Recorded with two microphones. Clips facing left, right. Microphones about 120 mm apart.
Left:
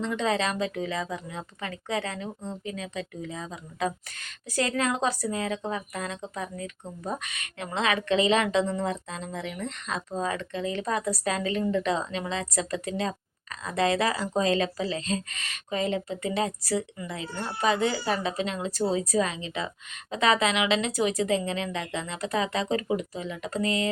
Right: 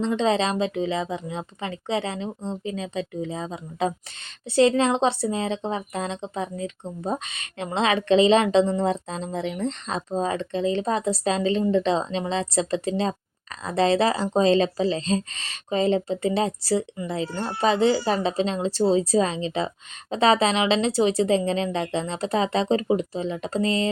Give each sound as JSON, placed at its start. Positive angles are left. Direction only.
{"t": 0.0, "sound": "a woman's voice", "side_deg": -25}